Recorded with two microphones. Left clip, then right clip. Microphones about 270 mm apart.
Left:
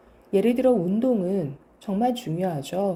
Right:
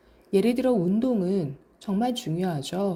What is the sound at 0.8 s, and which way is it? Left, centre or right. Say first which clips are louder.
Speech: left 2 dB; right.